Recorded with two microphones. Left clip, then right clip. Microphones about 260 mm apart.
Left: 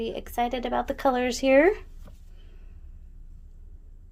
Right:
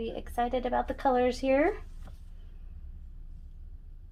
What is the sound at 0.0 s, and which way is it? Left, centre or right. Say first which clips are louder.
A woman's voice: left 4 dB; left.